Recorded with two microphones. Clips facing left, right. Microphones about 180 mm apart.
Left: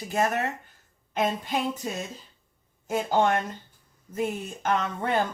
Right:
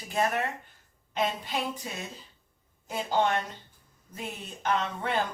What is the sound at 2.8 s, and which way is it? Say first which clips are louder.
Speech: left 4 dB; 45° left (ahead or behind).